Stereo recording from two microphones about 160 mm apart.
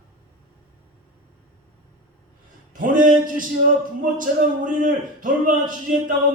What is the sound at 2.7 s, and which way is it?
A man's voice, 60° right (ahead or behind).